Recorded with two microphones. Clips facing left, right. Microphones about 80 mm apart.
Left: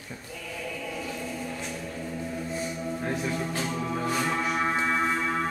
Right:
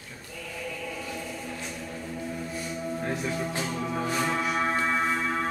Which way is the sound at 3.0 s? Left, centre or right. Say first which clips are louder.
Left 1 dB; centre.